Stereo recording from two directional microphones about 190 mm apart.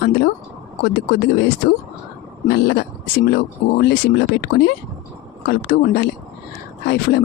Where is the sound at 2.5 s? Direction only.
60° left (ahead or behind).